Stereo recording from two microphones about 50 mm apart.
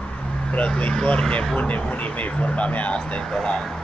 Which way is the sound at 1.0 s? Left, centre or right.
Left.